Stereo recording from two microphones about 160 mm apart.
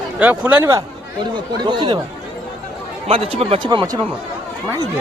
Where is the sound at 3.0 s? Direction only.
35° right (ahead or behind).